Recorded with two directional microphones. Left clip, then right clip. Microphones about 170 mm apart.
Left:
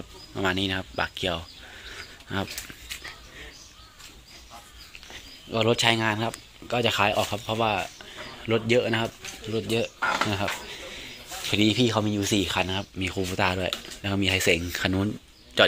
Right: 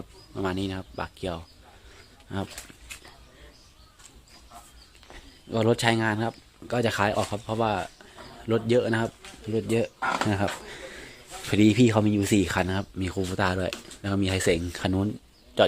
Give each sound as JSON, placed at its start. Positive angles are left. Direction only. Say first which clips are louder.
{"t": 0.3, "sound": "speech", "louder": "left 4 dB", "side_deg": -5}
{"t": 2.0, "sound": "a sound", "louder": "left 3 dB", "side_deg": -5}
{"t": 5.5, "sound": "speech", "louder": "left 1 dB", "side_deg": -40}